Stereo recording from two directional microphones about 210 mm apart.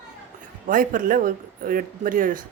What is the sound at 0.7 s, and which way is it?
Speech, 40° right (ahead or behind).